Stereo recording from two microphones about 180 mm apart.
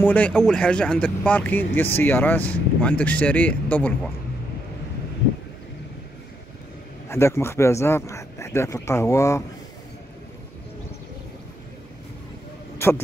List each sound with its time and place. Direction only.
0.0 s speech: 10° left (ahead or behind)
7.1 s speech: 15° left (ahead or behind)
12.7 s a sound: 15° left (ahead or behind)